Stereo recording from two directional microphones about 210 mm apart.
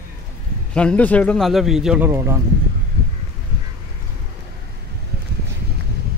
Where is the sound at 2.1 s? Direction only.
15° right (ahead or behind).